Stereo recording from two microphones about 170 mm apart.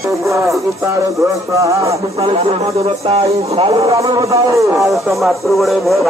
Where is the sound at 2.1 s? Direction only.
35° right (ahead or behind).